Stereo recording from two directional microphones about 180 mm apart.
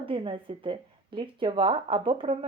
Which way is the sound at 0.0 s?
30° right (ahead or behind).